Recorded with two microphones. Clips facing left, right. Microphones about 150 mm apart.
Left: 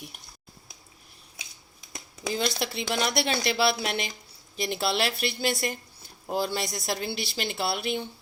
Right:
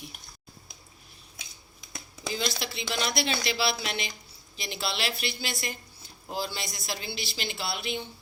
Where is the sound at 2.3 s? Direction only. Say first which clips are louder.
Left 4 dB; 50° left (ahead or behind).